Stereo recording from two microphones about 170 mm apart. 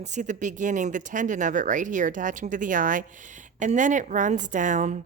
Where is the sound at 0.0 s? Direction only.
45° right (ahead or behind).